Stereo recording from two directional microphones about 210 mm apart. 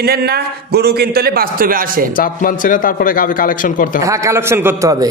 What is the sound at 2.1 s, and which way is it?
A man's voice, 40° left (ahead or behind).